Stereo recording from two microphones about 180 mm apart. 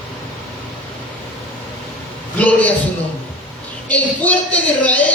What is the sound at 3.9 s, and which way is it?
A man's voice, 10° left (ahead or behind).